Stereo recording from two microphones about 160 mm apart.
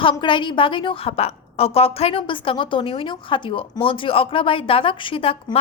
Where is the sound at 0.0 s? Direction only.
30° left (ahead or behind).